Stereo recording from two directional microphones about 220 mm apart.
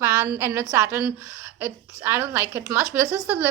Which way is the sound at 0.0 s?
15° right (ahead or behind).